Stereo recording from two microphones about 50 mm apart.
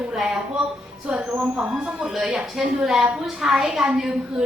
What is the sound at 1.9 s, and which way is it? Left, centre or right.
Speech, centre.